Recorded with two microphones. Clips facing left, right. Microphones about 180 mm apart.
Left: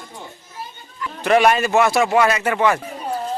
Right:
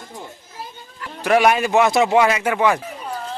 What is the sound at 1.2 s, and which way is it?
A man's voice, 5° right (ahead or behind).